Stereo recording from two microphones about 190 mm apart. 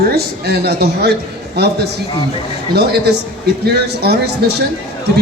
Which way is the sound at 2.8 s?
60° right (ahead or behind).